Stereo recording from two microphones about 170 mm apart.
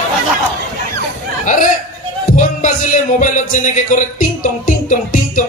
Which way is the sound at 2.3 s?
45° left (ahead or behind).